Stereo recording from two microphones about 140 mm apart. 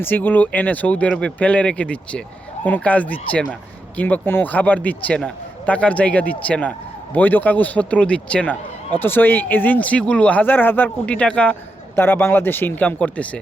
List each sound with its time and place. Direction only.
0.0 s speech: 15° left (ahead or behind)